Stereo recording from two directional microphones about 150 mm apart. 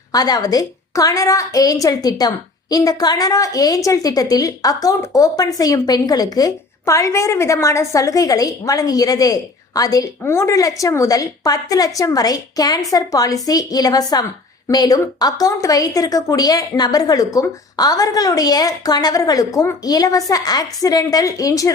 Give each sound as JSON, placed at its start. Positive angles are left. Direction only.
{"t": 0.1, "sound": "a woman's voice", "side_deg": 25}